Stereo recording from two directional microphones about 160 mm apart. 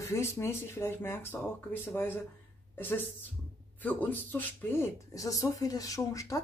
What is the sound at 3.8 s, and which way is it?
Speech, 10° left (ahead or behind).